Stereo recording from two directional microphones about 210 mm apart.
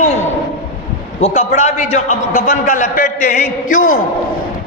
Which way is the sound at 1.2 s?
35° left (ahead or behind).